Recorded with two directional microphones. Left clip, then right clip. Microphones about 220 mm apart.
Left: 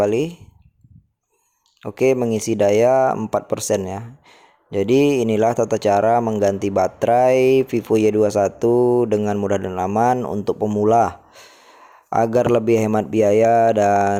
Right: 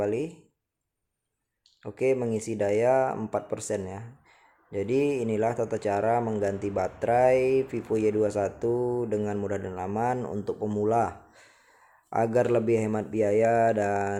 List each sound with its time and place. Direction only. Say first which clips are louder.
0.0 s speech: left 10 dB; 35° left (ahead or behind)
1.8 s speech: left 8 dB; 35° left (ahead or behind)